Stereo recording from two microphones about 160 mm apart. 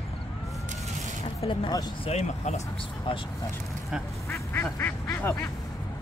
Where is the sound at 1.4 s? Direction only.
35° left (ahead or behind).